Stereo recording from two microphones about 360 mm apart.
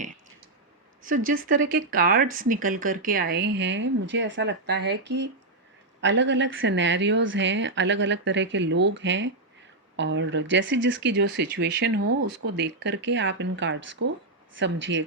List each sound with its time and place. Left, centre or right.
1.0 s a woman's voice: right